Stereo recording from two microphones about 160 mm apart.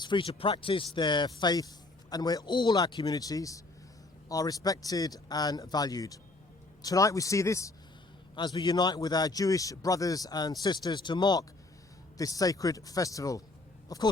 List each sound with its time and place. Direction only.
0.0 s speech: 30° left (ahead or behind)